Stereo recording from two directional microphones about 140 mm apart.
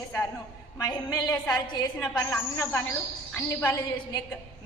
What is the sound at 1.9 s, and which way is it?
Speech, 10° left (ahead or behind).